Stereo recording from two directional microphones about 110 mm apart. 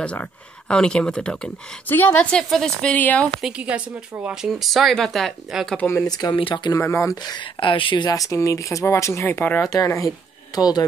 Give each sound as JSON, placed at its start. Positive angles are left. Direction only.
{"t": 0.0, "sound": "speech", "side_deg": 10}
{"t": 3.3, "sound": "a woman's voice", "side_deg": -5}
{"t": 5.8, "sound": "speech", "side_deg": 20}
{"t": 6.0, "sound": "speech", "side_deg": 35}
{"t": 6.3, "sound": "speech", "side_deg": 50}
{"t": 6.7, "sound": "speech", "side_deg": 25}
{"t": 7.2, "sound": "speech", "side_deg": 45}
{"t": 8.1, "sound": "speech", "side_deg": 30}
{"t": 9.8, "sound": "speech", "side_deg": 30}